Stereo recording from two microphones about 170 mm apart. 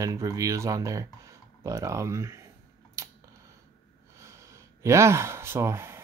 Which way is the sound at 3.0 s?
20° right (ahead or behind).